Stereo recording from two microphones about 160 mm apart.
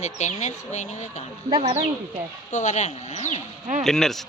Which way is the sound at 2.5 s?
50° left (ahead or behind).